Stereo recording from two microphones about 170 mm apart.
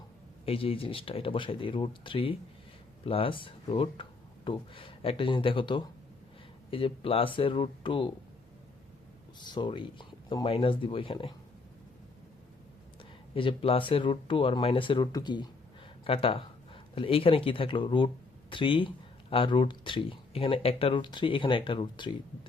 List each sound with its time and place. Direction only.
0.4 s speech: 35° left (ahead or behind)
9.4 s speech: 25° left (ahead or behind)
13.3 s speech: 30° left (ahead or behind)